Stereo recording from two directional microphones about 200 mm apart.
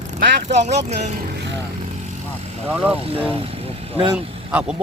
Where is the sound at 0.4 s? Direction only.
35° right (ahead or behind).